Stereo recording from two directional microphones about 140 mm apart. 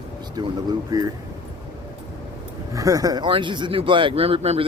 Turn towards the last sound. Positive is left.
turn(degrees=-45)  # may be behind; listen again after turning